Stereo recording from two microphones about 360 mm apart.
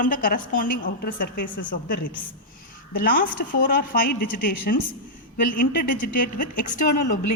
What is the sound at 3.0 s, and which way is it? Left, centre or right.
Speech, left.